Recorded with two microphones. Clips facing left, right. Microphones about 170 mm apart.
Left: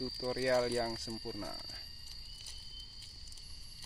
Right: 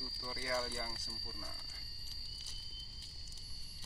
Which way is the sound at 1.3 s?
65° left (ahead or behind).